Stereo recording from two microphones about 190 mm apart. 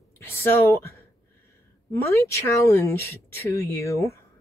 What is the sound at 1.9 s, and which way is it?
Speech, 15° left (ahead or behind).